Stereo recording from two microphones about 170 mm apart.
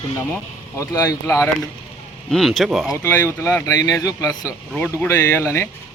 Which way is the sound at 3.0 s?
15° left (ahead or behind).